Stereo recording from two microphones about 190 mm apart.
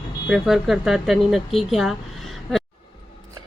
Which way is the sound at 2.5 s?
Centre (ahead or behind).